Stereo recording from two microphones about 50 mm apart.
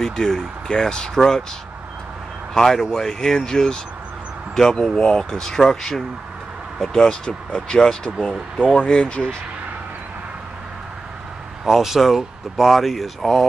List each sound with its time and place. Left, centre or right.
0.0 s speech: centre
2.5 s speech: centre
11.6 s speech: centre